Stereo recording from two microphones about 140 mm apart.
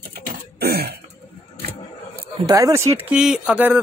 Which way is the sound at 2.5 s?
20° right (ahead or behind).